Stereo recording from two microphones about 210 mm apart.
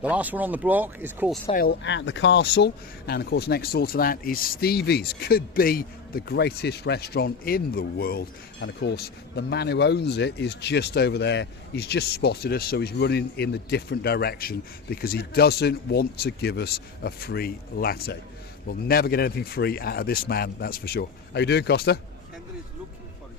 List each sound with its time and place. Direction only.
0.0 s speech: 5° right (ahead or behind)
1.5 s speech: 50° left (ahead or behind)